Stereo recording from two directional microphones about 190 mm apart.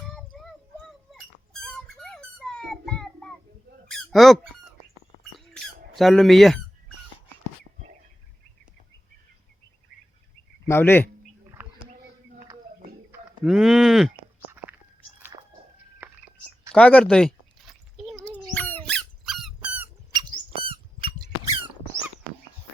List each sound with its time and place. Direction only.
0.0 s a sound: 5° left (ahead or behind)
3.8 s squawk: centre (ahead or behind)
5.5 s squawk: centre (ahead or behind)
10.7 s a man's voice: 10° left (ahead or behind)
13.1 s speech: centre (ahead or behind)
15.2 s a sound: 20° right (ahead or behind)
16.7 s a sound: 5° left (ahead or behind)
19.6 s squeak: 10° right (ahead or behind)
20.1 s squeak: 25° right (ahead or behind)